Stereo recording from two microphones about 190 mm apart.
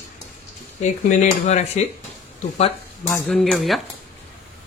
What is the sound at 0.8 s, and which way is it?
Speech, 40° left (ahead or behind).